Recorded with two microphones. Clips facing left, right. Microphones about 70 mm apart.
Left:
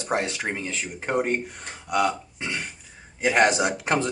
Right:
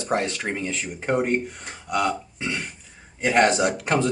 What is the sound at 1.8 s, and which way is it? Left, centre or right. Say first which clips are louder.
Burping: even; centre.